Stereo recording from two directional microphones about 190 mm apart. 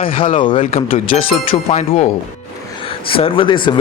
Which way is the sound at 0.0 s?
30° left (ahead or behind).